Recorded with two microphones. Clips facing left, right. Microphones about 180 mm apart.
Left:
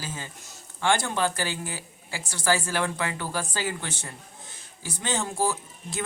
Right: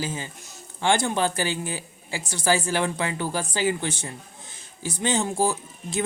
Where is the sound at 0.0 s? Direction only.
15° right (ahead or behind).